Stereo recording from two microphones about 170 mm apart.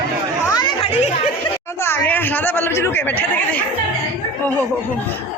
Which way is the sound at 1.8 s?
10° left (ahead or behind).